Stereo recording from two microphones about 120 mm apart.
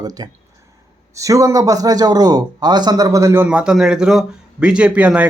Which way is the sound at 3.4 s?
5° right (ahead or behind).